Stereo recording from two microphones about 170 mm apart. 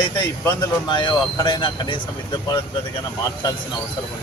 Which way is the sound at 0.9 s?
25° left (ahead or behind).